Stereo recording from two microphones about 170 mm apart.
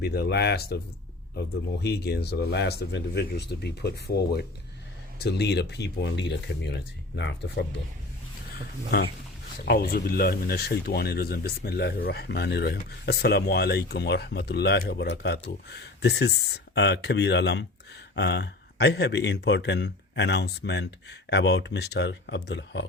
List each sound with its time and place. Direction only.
0.0 s speech: 70° left (ahead or behind)
1.8 s speech: 70° left (ahead or behind)
8.9 s speech: 75° left (ahead or behind); by 22.9 s 90° left